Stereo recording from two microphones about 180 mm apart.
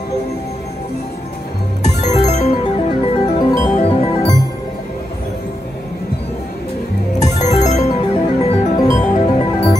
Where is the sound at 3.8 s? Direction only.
30° left (ahead or behind).